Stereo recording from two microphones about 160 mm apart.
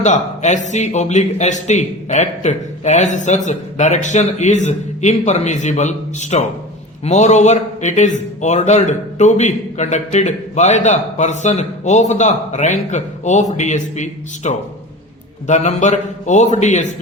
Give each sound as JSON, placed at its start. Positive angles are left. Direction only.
{"t": 0.0, "sound": "speech", "side_deg": 50}